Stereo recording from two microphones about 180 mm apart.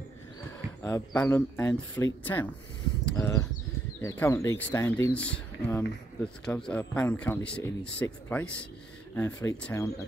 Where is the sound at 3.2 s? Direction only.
20° left (ahead or behind).